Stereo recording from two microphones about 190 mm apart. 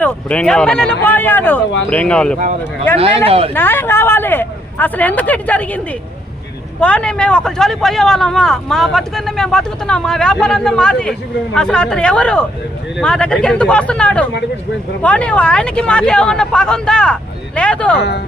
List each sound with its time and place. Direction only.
0.0 s speech: 5° left (ahead or behind)
3.0 s speech: 30° right (ahead or behind)
3.5 s speech: 10° left (ahead or behind)